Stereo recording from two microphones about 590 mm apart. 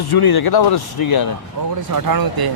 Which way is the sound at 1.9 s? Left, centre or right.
Right.